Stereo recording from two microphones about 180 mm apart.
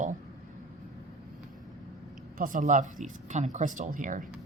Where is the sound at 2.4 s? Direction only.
45° right (ahead or behind).